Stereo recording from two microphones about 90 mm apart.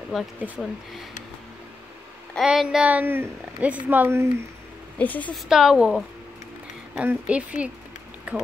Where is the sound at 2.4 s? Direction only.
5° right (ahead or behind).